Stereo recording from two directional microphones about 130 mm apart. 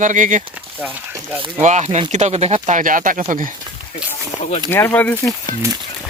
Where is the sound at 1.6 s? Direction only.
60° right (ahead or behind); by 3.2 s 90° right.